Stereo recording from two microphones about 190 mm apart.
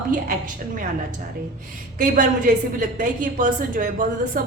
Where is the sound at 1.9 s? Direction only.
45° right (ahead or behind).